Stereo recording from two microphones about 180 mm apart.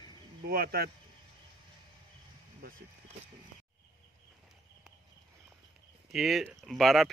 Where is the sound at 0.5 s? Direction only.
55° right (ahead or behind).